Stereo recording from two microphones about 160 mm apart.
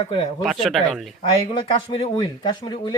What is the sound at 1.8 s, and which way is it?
Speech, 35° left (ahead or behind).